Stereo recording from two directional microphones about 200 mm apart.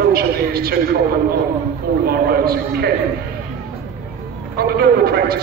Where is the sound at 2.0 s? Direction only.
50° right (ahead or behind).